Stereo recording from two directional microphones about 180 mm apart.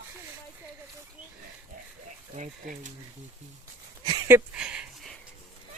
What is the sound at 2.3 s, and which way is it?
Speech, 45° right (ahead or behind).